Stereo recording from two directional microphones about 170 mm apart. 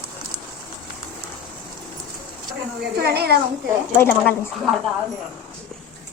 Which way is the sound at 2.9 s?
65° right (ahead or behind).